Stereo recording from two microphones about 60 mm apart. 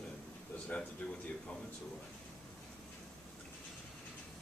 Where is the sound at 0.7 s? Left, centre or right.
Left.